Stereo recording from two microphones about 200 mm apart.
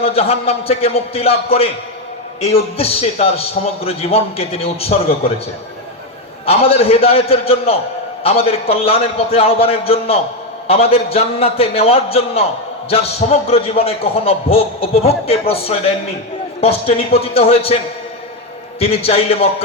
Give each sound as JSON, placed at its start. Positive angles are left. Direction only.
{"t": 0.0, "sound": "a man's voice", "side_deg": 30}
{"t": 6.4, "sound": "a man's voice", "side_deg": 30}
{"t": 18.8, "sound": "a man's voice", "side_deg": 30}